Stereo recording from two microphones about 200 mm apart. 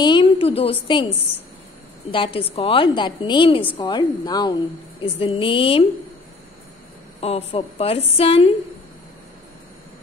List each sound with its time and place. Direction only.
0.0 s a woman's voice: 25° left (ahead or behind)
7.2 s a woman's voice: 30° left (ahead or behind)